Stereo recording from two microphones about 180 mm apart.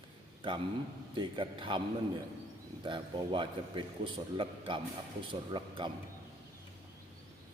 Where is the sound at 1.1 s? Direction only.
25° right (ahead or behind).